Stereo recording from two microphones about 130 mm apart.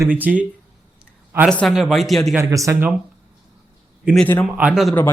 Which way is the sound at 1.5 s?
5° left (ahead or behind).